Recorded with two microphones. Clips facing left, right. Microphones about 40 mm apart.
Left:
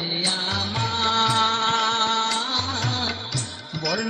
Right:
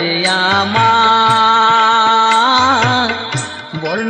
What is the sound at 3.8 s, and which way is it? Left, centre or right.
Music, right.